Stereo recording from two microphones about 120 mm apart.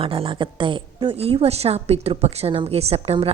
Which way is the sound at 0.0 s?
50° right (ahead or behind).